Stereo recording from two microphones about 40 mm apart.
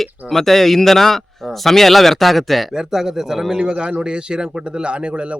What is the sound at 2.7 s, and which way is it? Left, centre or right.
A man's voice, centre.